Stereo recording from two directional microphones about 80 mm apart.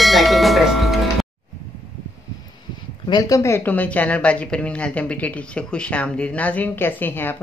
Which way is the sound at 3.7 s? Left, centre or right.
Left.